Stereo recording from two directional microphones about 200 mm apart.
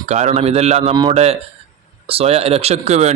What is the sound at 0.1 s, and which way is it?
A man's voice, 35° right (ahead or behind).